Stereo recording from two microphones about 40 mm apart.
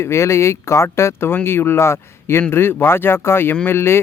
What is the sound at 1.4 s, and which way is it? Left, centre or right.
Speech, left.